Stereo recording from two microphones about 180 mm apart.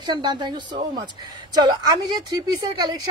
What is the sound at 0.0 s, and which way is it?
A woman's voice, 25° right (ahead or behind).